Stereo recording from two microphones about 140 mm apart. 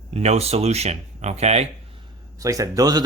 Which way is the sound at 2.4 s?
25° right (ahead or behind).